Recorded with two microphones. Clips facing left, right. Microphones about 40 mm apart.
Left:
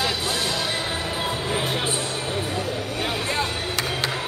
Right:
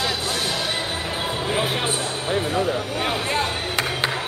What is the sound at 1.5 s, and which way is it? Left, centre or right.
Music, centre.